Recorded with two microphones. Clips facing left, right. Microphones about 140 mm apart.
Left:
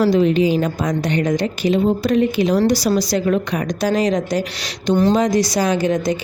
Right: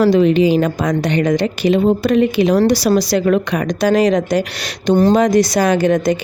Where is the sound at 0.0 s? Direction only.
75° right (ahead or behind).